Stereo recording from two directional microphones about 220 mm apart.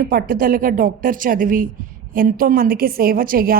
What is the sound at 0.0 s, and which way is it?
A man's voice, 40° right (ahead or behind).